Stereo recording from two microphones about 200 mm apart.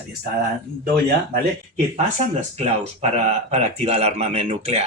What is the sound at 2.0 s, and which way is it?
Speech, 35° right (ahead or behind).